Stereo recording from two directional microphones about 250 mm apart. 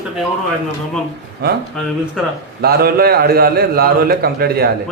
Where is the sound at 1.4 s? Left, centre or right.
Right.